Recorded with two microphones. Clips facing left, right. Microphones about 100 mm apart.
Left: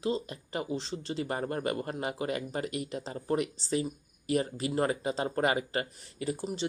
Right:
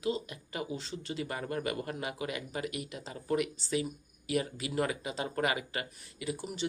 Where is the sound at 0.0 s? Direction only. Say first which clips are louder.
Left 2 dB; 30° left (ahead or behind).